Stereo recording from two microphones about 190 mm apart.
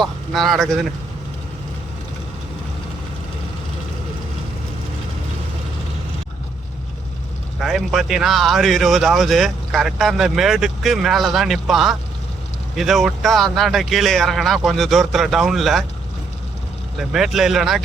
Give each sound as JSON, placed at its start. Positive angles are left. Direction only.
{"t": 0.0, "sound": "speech", "side_deg": 0}
{"t": 7.6, "sound": "speech", "side_deg": 0}
{"t": 17.1, "sound": "speech", "side_deg": 0}